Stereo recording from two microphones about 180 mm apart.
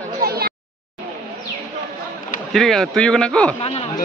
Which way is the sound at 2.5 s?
Centre (ahead or behind).